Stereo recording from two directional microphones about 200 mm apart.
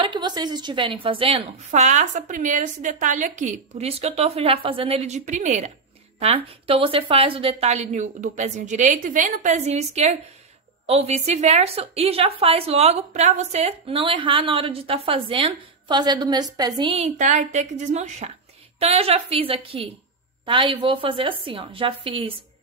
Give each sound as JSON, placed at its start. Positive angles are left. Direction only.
{"t": 0.0, "sound": "a woman's voice", "side_deg": -25}
{"t": 17.2, "sound": "a woman's voice", "side_deg": -35}